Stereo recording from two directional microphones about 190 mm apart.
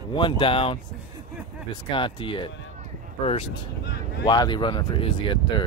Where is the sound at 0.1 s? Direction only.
25° left (ahead or behind).